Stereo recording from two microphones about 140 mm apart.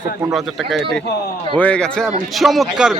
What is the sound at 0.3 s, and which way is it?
Speech, centre (ahead or behind).